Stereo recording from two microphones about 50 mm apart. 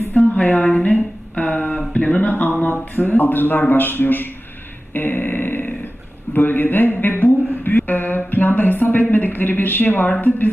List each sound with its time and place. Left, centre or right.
0.1 s a sound: left
0.6 s speech: left
1.4 s a sound: left
2.9 s a man's voice: left
4.9 s grunt: left
6.3 s speech: left